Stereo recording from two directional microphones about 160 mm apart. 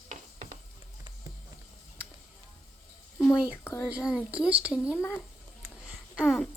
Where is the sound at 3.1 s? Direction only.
Centre (ahead or behind).